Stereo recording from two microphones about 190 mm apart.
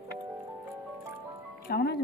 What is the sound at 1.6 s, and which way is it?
Speech, 55° left (ahead or behind).